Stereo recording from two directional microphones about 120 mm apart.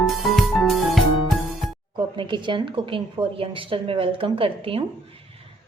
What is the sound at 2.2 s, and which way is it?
A woman's voice, 40° right (ahead or behind).